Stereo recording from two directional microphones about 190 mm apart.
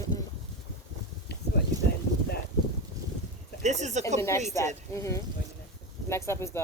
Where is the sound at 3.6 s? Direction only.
40° right (ahead or behind).